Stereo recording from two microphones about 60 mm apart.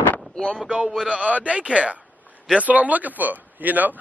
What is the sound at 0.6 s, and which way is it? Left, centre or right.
A man's voice, centre.